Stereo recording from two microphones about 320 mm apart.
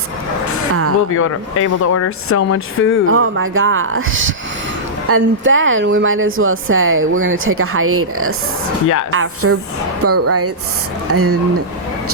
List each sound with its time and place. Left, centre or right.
1.1 s speech: left
3.1 s speech: right